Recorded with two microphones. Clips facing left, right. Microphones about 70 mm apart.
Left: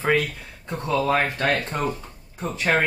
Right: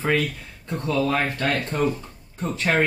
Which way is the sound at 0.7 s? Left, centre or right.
Centre.